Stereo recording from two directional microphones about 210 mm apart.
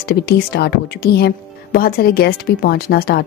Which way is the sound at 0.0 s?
50° left (ahead or behind).